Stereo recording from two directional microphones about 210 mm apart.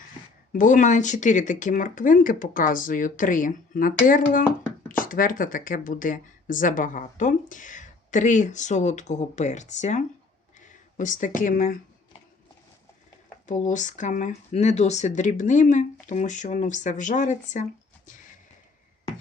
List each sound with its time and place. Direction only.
0.5 s speech: 40° left (ahead or behind)
13.5 s speech: 35° left (ahead or behind)